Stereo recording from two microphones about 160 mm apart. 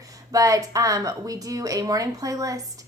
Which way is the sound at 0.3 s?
20° right (ahead or behind).